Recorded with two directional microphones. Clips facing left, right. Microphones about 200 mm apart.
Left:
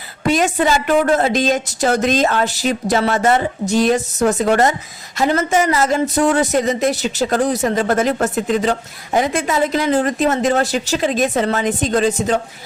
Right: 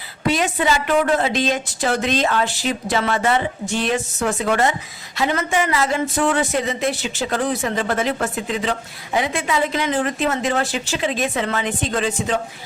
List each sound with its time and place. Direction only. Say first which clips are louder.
0.3 s speech: left 4 dB; 45° left (ahead or behind)